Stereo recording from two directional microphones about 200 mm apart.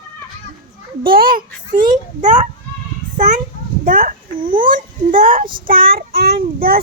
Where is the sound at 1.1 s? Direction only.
45° right (ahead or behind).